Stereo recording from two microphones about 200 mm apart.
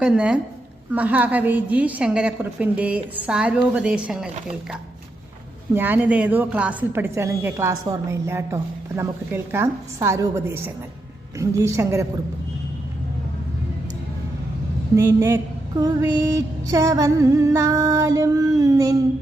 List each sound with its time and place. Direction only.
0.0 s a woman's voice: 5° right (ahead or behind)
5.7 s a woman's voice: 10° right (ahead or behind)
14.9 s a woman's voice: 15° right (ahead or behind)